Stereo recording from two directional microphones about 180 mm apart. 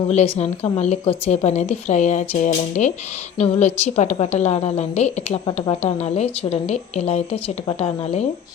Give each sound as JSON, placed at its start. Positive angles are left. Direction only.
{"t": 0.1, "sound": "a woman's voice", "side_deg": 35}